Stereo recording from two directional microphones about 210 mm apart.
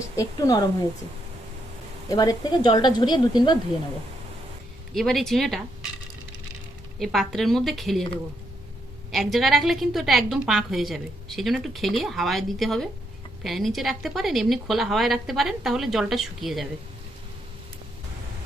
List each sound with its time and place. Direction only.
0.2 s a woman's voice: 15° left (ahead or behind)
2.0 s speech: 15° left (ahead or behind)
4.9 s a woman's voice: centre (ahead or behind)
7.0 s a woman's voice: centre (ahead or behind)
9.1 s a woman's voice: centre (ahead or behind)